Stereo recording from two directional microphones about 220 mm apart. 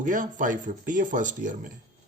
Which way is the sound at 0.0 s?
35° right (ahead or behind).